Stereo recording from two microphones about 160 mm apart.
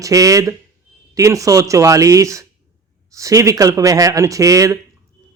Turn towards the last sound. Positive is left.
turn(degrees=-20)  # may be behind; listen again after turning